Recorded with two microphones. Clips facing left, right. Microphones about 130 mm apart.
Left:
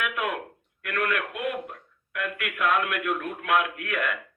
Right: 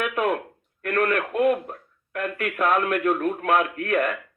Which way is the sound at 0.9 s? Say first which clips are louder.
Right 5 dB; 40° right (ahead or behind).